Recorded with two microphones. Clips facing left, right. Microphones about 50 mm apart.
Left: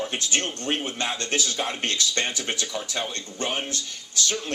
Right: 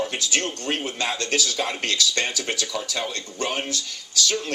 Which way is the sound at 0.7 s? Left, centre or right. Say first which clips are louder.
Right 1 dB; left.